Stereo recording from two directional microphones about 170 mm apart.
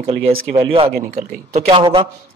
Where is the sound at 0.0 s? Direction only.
35° right (ahead or behind).